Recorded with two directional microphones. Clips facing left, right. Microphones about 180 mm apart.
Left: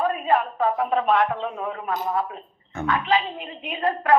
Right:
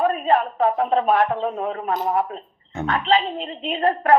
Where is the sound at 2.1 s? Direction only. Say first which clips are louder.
Right 3 dB; 20° right (ahead or behind).